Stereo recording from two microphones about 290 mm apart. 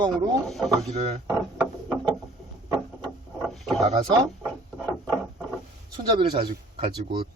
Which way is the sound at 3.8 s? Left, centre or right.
Right.